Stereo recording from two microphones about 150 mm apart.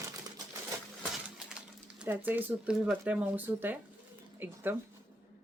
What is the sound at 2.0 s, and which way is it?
Speech, 10° right (ahead or behind).